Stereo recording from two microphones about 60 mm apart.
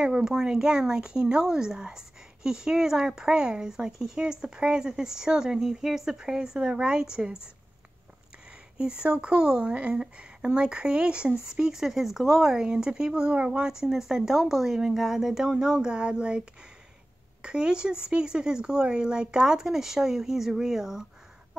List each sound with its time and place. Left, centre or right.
0.0 s speech: centre
8.7 s speech: centre